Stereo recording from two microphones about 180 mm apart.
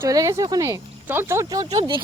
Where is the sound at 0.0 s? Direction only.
20° right (ahead or behind).